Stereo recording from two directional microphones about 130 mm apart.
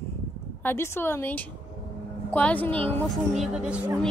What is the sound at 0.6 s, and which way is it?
A woman's voice, 20° left (ahead or behind).